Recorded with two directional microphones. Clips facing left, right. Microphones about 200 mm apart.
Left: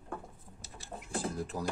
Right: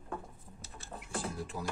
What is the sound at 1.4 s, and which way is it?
Speech, 40° left (ahead or behind).